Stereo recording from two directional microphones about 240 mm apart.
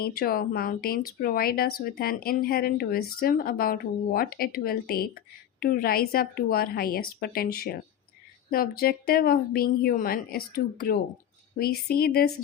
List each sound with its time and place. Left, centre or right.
0.0 s speech: left